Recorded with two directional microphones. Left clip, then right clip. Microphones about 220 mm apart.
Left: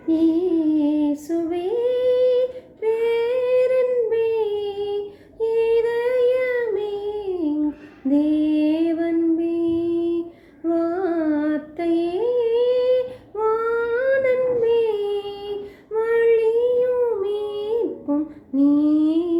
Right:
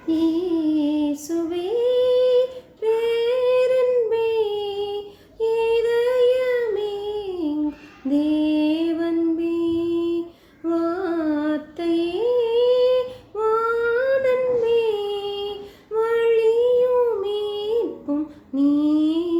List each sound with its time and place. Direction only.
0.1 s female singing: 15° right (ahead or behind)
2.8 s child singing: 15° right (ahead or behind)
8.1 s female singing: 15° right (ahead or behind)
10.7 s music: 15° right (ahead or behind)
16.0 s child singing: 15° right (ahead or behind)
18.5 s female singing: 15° right (ahead or behind)